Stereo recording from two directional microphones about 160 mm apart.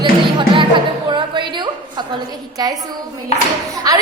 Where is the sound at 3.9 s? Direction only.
25° right (ahead or behind).